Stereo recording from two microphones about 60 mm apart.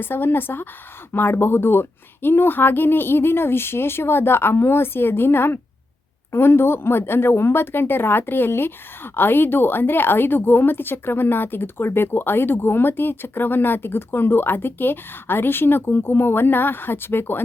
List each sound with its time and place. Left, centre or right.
0.0 s a woman's voice: left